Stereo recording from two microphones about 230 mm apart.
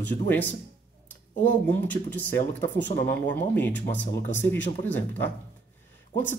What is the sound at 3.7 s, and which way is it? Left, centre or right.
Speech, left.